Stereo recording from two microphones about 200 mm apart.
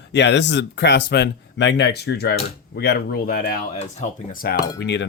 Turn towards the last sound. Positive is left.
turn(degrees=60)  # may be behind; listen again after turning